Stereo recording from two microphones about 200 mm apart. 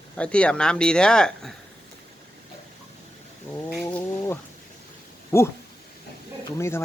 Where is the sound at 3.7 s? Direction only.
5° left (ahead or behind).